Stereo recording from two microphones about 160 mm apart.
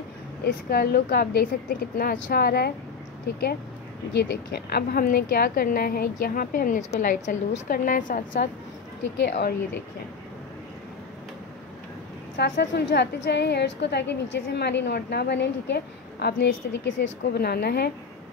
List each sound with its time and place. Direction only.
0.7 s a woman's voice: 70° left (ahead or behind)
4.1 s a woman's voice: 90° left; by 8.5 s 55° left (ahead or behind)
12.4 s a woman's voice: 90° left